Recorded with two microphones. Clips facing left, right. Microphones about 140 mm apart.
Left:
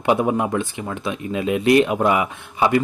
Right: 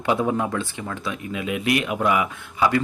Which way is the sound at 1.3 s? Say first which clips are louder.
Left 8 dB; 30° left (ahead or behind).